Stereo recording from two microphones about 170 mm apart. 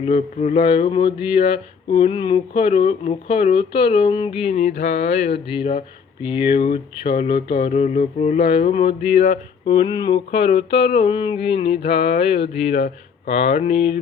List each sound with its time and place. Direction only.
0.0 s speech: 40° left (ahead or behind)
9.7 s speech: 30° left (ahead or behind)